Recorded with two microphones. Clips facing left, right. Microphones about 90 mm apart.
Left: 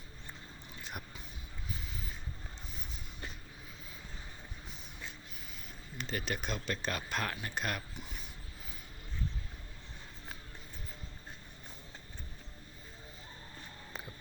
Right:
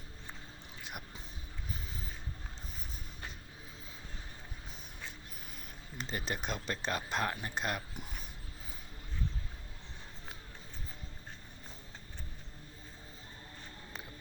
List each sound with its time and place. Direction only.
0.8 s music: 10° right (ahead or behind)
6.0 s speech: 30° right (ahead or behind)